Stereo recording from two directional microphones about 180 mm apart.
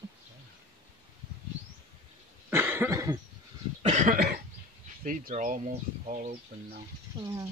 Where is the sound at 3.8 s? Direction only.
45° right (ahead or behind).